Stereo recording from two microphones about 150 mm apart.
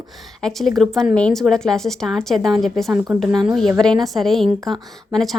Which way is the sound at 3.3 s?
30° right (ahead or behind).